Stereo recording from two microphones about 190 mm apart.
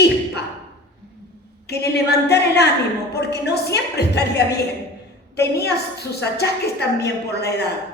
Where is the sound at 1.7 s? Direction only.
60° left (ahead or behind).